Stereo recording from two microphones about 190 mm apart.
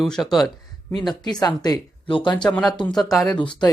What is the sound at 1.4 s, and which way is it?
Speech, 20° left (ahead or behind).